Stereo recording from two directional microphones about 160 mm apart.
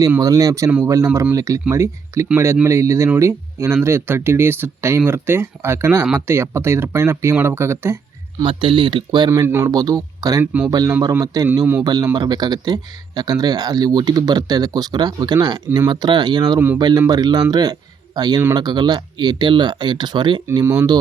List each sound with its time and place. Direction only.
0.2 s speech: 20° right (ahead or behind)
8.4 s speech: 30° right (ahead or behind)
9.3 s speech: 15° right (ahead or behind)
10.4 s speech: 10° right (ahead or behind)
10.7 s speech: 25° right (ahead or behind)